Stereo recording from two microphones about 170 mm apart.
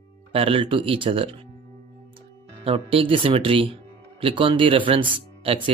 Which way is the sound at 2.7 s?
35° right (ahead or behind).